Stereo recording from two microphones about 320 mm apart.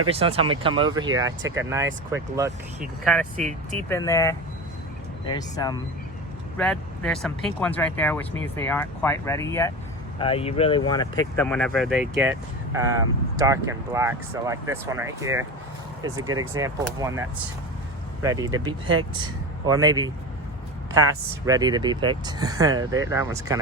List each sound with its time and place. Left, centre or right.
0.1 s speech: centre
3.3 s speech: right
3.8 s speech: centre
6.6 s speech: centre